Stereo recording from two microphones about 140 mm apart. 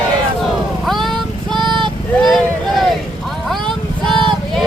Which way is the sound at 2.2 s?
5° left (ahead or behind).